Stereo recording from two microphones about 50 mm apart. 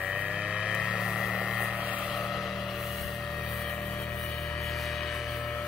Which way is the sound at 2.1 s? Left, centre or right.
Centre.